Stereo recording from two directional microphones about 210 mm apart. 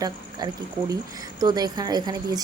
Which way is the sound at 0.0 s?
20° right (ahead or behind).